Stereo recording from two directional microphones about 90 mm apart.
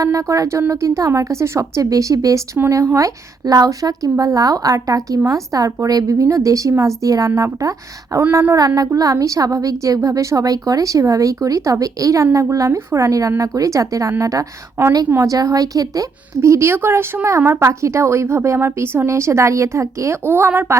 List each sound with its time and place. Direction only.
0.0 s a woman's voice: 35° right (ahead or behind)
8.2 s a woman's voice: 25° right (ahead or behind)
8.5 s a woman's voice: 45° right (ahead or behind); by 20.7 s 25° right (ahead or behind)